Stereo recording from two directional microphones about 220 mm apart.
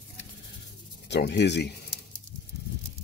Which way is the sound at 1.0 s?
50° left (ahead or behind).